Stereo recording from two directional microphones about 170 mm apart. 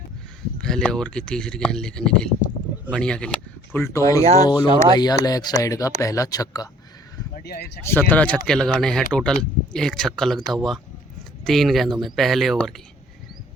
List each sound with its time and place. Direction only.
0.6 s speech: 5° left (ahead or behind)
4.2 s speech: 40° right (ahead or behind)
4.4 s speech: 25° left (ahead or behind)
7.3 s speech: 65° left (ahead or behind)
8.1 s speech: 5° left (ahead or behind)